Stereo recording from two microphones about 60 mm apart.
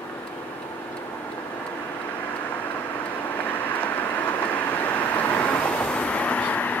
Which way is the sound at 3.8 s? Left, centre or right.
Left.